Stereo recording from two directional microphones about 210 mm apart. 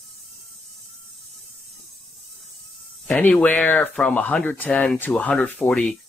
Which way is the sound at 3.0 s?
10° left (ahead or behind).